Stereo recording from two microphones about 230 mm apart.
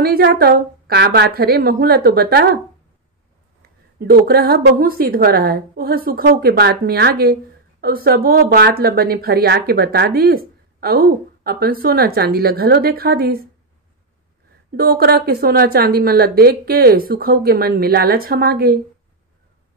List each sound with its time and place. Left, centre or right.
0.0 s a woman's voice: right
4.0 s a woman's voice: right
14.8 s a woman's voice: right